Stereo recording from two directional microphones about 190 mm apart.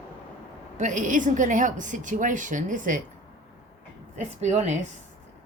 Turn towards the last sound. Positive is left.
turn(degrees=-40)  # may be behind; listen again after turning